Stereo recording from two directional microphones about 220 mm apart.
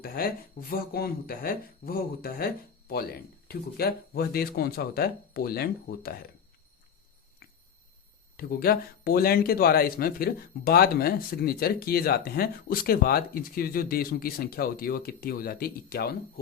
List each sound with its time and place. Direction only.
0.0 s speech: 40° left (ahead or behind)
7.4 s squish: 45° left (ahead or behind)
8.4 s speech: 45° left (ahead or behind)